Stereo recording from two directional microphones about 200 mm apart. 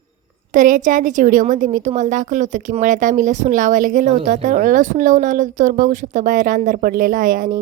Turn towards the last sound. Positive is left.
turn(degrees=-45)  # may be behind; listen again after turning